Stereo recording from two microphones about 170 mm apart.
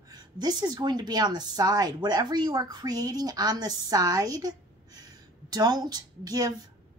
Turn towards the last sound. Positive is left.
turn(degrees=-20)  # may be behind; listen again after turning